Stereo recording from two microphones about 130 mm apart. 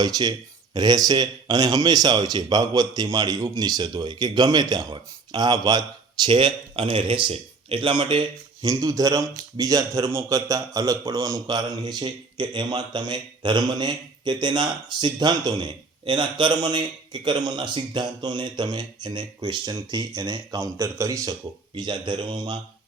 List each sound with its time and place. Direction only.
0.0 s a man's voice: 30° right (ahead or behind)
8.6 s a man's voice: 30° right (ahead or behind)
21.8 s a man's voice: 35° right (ahead or behind)